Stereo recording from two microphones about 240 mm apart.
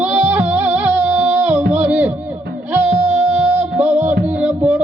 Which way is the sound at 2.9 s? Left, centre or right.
Right.